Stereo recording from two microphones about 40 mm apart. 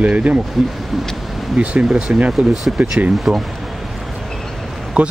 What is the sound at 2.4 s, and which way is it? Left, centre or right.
Speech, right.